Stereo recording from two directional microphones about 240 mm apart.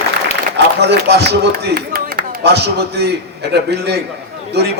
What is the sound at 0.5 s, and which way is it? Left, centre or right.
A man's voice, right.